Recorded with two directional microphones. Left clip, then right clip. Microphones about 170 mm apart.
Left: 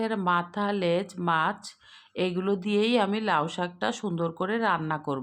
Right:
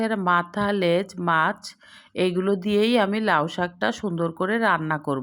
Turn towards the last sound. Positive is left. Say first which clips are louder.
# right 5 dB
turn(degrees=-20)  # may be behind; listen again after turning